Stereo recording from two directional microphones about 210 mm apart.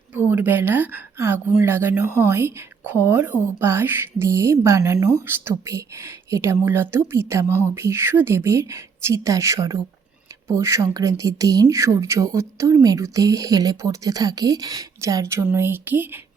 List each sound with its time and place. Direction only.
0.1 s speech: 10° right (ahead or behind)